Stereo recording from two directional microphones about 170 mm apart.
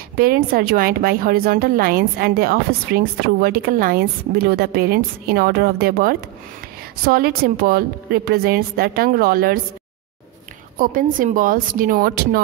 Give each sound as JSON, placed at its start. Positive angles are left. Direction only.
{"t": 0.2, "sound": "speech", "side_deg": -60}
{"t": 10.8, "sound": "speech", "side_deg": -50}